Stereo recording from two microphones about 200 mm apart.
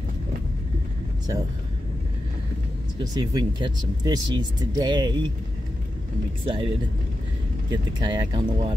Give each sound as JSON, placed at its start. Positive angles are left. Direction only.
{"t": 3.0, "sound": "speech", "side_deg": -20}
{"t": 6.4, "sound": "speech", "side_deg": -25}
{"t": 7.7, "sound": "speech", "side_deg": -20}